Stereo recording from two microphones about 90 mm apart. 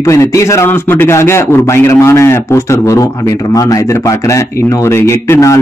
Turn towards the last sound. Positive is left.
turn(degrees=30)  # may be behind; listen again after turning